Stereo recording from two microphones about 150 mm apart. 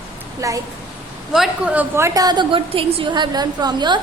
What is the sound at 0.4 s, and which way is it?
Speech, 20° right (ahead or behind).